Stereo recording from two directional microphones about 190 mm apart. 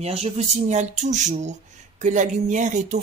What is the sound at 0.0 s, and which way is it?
Speech, 35° right (ahead or behind).